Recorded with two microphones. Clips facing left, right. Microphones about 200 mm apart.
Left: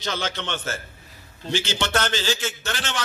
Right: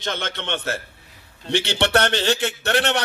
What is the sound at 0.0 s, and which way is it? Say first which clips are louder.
A man's voice: even; 55° right (ahead or behind).